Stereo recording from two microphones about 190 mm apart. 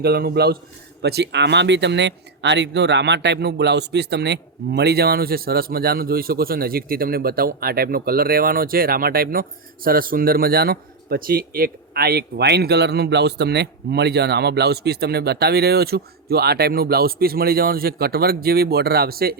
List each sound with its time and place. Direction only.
0.0 s speech: 55° right (ahead or behind)